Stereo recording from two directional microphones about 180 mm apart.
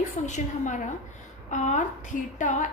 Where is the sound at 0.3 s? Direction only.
40° left (ahead or behind).